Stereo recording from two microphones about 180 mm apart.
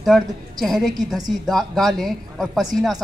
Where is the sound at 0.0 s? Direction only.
Centre (ahead or behind).